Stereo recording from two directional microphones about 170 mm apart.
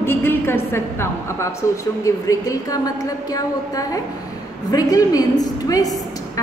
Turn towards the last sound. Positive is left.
turn(degrees=20)  # may be behind; listen again after turning